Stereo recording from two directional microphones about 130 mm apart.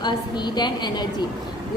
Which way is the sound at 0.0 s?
35° left (ahead or behind).